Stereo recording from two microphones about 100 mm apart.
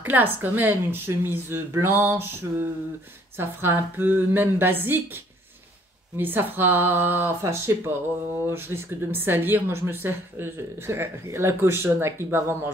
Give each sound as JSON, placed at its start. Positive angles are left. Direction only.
{"t": 0.0, "sound": "a woman's voice", "side_deg": -20}
{"t": 3.3, "sound": "a woman's voice", "side_deg": -20}